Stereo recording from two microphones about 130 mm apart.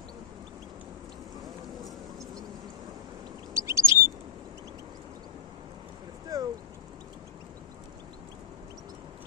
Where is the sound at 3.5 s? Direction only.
20° right (ahead or behind).